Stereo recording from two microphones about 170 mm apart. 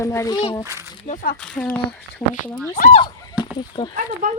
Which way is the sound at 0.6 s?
15° right (ahead or behind).